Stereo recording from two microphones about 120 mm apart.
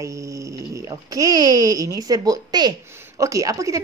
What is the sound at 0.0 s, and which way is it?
Speech, 25° right (ahead or behind).